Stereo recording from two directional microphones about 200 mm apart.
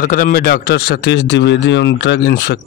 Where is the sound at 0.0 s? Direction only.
45° left (ahead or behind).